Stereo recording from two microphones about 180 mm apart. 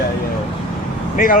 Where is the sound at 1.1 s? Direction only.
50° left (ahead or behind).